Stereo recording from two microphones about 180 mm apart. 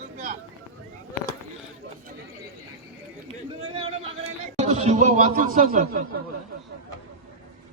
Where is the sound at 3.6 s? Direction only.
35° right (ahead or behind); by 6.0 s 55° right (ahead or behind).